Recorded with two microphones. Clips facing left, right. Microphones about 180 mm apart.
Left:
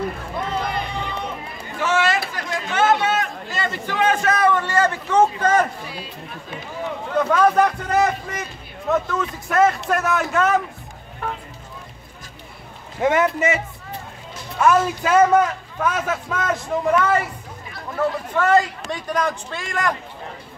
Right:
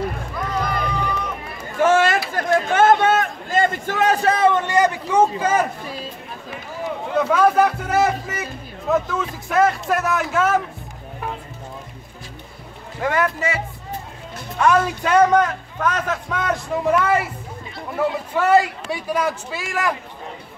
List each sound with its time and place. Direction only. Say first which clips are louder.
0.5 s run: right 3 dB; 25° left (ahead or behind)
1.8 s a sound: right 4 dB; 50° right (ahead or behind); by 5.7 s 10° right (ahead or behind)
7.2 s a man's voice: even; centre (ahead or behind)
13.0 s a man's voice: left 3 dB; 20° left (ahead or behind)
14.6 s a man's voice: even; 5° left (ahead or behind)